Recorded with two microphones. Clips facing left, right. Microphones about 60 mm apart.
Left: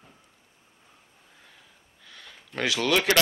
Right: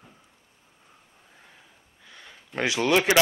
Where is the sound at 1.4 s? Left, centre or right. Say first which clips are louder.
Right 1 dB; centre.